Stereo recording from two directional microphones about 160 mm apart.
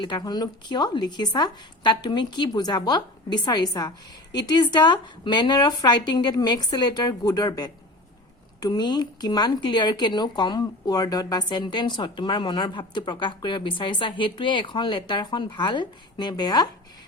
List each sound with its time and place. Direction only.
0.0 s speech: 30° left (ahead or behind)